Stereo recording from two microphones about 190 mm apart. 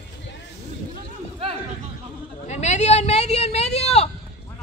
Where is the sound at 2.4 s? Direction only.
35° left (ahead or behind).